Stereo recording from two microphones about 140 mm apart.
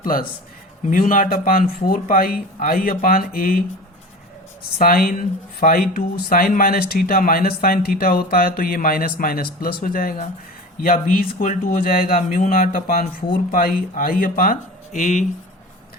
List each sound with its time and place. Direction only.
0.0 s a man's voice: 90° left
0.9 s speech: 70° left (ahead or behind); by 3.6 s 90° left
4.8 s speech: 90° left; by 15.3 s 65° left (ahead or behind)